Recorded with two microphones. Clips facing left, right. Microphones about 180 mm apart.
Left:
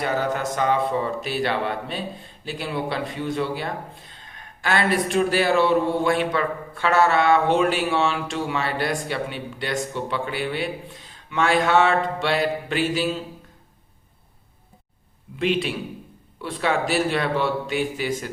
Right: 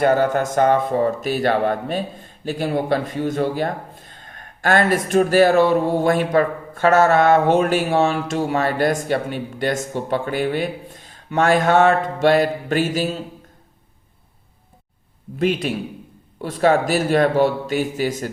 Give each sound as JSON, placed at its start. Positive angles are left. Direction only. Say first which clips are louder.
{"t": 0.0, "sound": "speech", "louder": "right 7 dB", "side_deg": -50}
{"t": 15.4, "sound": "speech", "louder": "right 3 dB", "side_deg": -45}